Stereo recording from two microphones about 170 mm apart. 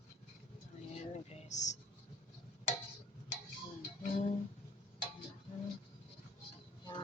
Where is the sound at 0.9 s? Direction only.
40° left (ahead or behind).